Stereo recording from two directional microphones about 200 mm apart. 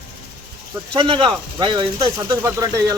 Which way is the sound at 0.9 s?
25° right (ahead or behind).